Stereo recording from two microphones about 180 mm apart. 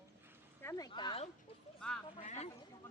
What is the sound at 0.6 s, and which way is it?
Speech, 20° left (ahead or behind).